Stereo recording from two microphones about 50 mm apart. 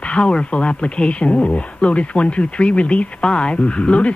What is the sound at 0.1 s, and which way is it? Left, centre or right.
Speech, left.